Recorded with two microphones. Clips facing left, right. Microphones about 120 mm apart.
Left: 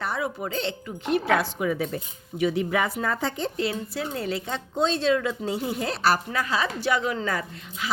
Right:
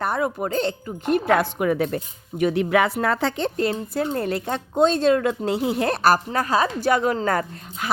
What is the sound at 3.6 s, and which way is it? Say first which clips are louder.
A woman's voice: right 6 dB; 50° right (ahead or behind).